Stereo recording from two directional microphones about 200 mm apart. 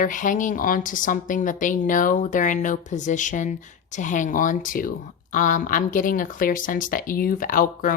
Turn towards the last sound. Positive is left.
turn(degrees=45)  # may be behind; listen again after turning